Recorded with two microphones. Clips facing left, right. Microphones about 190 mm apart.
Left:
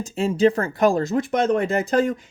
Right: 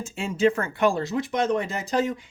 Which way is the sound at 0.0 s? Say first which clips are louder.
Left 4 dB; 35° left (ahead or behind).